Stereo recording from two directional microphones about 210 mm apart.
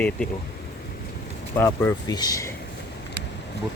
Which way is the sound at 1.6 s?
15° left (ahead or behind).